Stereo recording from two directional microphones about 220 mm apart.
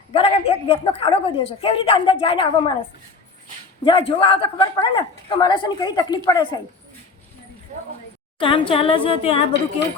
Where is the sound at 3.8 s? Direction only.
25° left (ahead or behind).